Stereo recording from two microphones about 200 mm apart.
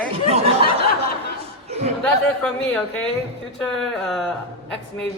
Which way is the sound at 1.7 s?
30° right (ahead or behind).